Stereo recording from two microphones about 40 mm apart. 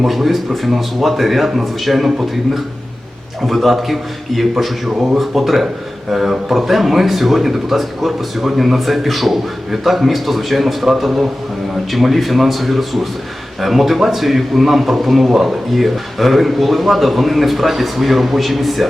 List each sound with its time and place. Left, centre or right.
0.0 s a man's voice: centre
3.4 s a man's voice: centre